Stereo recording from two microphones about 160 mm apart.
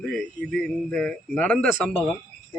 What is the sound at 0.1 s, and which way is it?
A man's voice, 5° left (ahead or behind).